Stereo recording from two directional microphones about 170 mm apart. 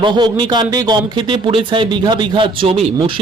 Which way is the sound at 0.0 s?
25° right (ahead or behind).